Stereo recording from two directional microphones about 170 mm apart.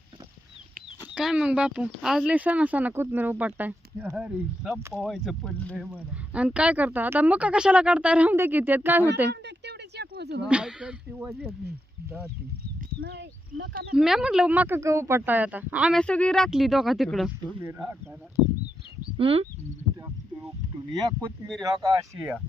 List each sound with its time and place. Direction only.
1.1 s speech: 5° right (ahead or behind)
9.3 s a sound: 85° right
10.5 s speech: 5° right (ahead or behind)
13.0 s speech: 85° right
13.9 s speech: 5° right (ahead or behind)
16.0 s speech: 5° left (ahead or behind)
17.6 s speech: 15° right (ahead or behind)
19.1 s speech: 35° right (ahead or behind)
21.4 s speech: centre (ahead or behind)
21.8 s speech: 20° right (ahead or behind)